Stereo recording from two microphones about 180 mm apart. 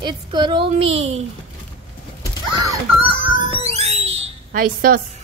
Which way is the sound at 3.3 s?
35° right (ahead or behind).